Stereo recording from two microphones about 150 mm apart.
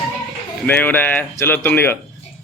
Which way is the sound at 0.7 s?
10° left (ahead or behind).